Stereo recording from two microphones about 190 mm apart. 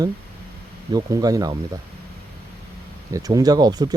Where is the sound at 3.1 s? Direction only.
20° right (ahead or behind).